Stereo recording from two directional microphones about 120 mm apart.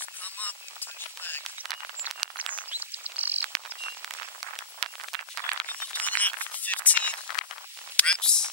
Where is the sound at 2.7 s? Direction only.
15° right (ahead or behind).